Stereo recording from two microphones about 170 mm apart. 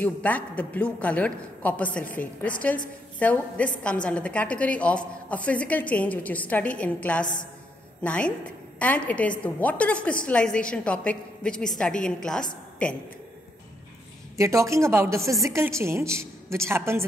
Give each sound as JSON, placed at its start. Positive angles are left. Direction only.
{"t": 0.0, "sound": "a man's voice", "side_deg": 10}
{"t": 14.3, "sound": "a woman's voice", "side_deg": -15}